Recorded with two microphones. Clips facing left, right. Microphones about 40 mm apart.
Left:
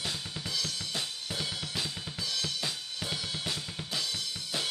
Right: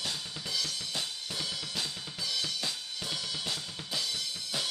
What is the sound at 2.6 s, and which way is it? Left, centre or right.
Drum kit, centre.